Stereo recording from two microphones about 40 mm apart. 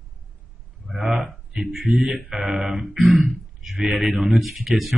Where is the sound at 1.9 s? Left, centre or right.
Centre.